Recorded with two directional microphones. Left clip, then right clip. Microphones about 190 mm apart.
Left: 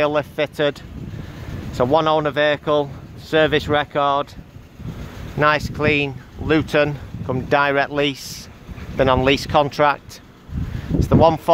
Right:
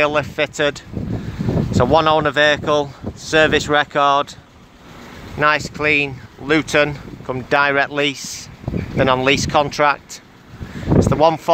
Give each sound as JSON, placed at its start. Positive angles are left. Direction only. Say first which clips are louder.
{"t": 0.0, "sound": "speech", "louder": "right 2 dB", "side_deg": 0}
{"t": 5.4, "sound": "speech", "louder": "right 1 dB", "side_deg": 5}
{"t": 11.0, "sound": "speech", "louder": "even", "side_deg": 0}